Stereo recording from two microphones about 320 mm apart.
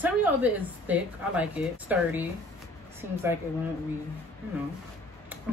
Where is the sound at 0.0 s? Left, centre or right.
Centre.